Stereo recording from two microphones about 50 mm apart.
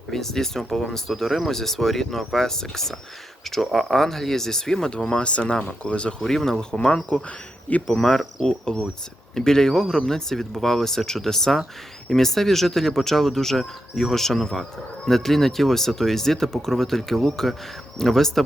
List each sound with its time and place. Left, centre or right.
0.1 s speech: centre
6.2 s speech: centre